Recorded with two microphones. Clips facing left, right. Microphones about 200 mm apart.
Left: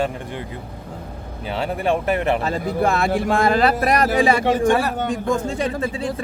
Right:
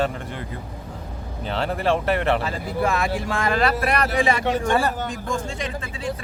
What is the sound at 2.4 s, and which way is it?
Speech, 45° left (ahead or behind).